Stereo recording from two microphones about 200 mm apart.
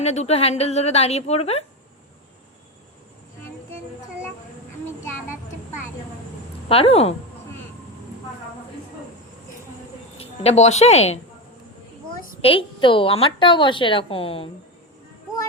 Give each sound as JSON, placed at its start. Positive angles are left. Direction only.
{"t": 0.0, "sound": "a woman's voice", "side_deg": 30}
{"t": 6.7, "sound": "a woman's voice", "side_deg": 30}
{"t": 10.2, "sound": "a woman's voice", "side_deg": 30}
{"t": 12.4, "sound": "a woman's voice", "side_deg": 25}